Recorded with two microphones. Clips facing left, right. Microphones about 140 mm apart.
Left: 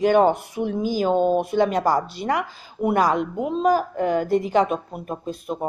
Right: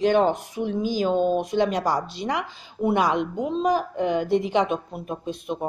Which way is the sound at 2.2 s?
20° right (ahead or behind).